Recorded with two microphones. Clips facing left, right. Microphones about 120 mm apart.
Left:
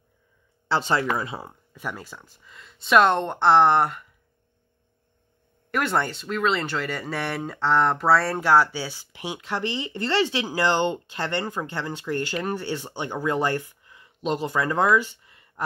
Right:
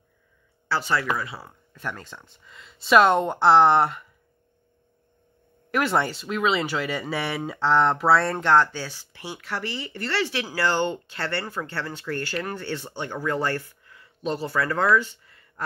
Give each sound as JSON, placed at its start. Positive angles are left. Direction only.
{"t": 0.7, "sound": "speech", "side_deg": 20}
{"t": 1.7, "sound": "speech", "side_deg": 10}
{"t": 5.7, "sound": "speech", "side_deg": 0}